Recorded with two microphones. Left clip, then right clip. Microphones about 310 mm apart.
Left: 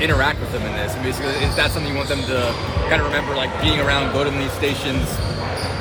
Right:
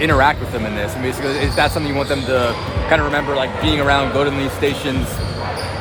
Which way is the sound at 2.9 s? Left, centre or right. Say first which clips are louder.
Right 4 dB; centre.